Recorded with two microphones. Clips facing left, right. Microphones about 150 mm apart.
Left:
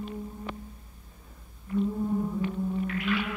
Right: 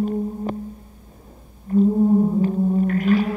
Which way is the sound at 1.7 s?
40° right (ahead or behind).